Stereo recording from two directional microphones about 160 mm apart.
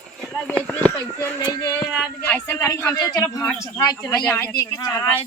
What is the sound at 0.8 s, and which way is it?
Speech, 15° left (ahead or behind).